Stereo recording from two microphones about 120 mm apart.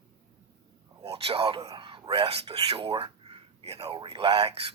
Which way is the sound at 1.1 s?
55° right (ahead or behind).